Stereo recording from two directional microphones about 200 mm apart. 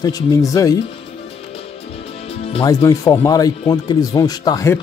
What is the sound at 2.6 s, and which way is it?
Speech, 15° left (ahead or behind).